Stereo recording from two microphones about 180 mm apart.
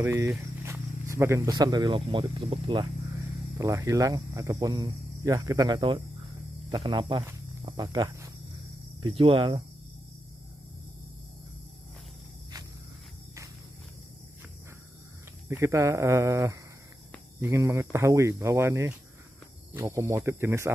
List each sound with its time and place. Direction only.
0.0 s speech: 15° right (ahead or behind)
15.4 s speech: 15° right (ahead or behind)